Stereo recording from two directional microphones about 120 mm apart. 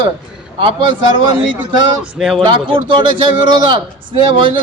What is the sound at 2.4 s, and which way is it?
Speech, 45° right (ahead or behind).